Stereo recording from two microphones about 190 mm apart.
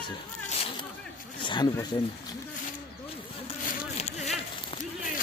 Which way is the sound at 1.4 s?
25° left (ahead or behind).